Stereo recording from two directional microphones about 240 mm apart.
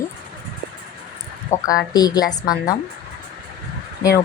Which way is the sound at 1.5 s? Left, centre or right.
Centre.